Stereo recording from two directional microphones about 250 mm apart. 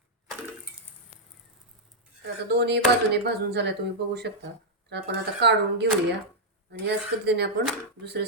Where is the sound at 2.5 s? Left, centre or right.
Right.